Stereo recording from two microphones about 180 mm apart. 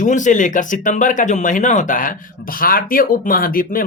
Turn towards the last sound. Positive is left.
turn(degrees=50)  # may be behind; listen again after turning